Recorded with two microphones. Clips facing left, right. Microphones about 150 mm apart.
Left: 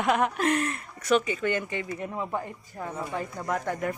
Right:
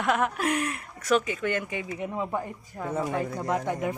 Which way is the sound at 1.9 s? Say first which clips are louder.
Right 4 dB; 10° right (ahead or behind).